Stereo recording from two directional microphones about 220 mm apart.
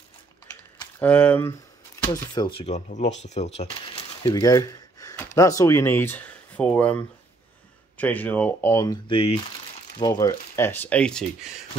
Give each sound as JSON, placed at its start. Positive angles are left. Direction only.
{"t": 0.7, "sound": "speech", "side_deg": 10}
{"t": 2.3, "sound": "speech", "side_deg": 20}
{"t": 8.0, "sound": "speech", "side_deg": 5}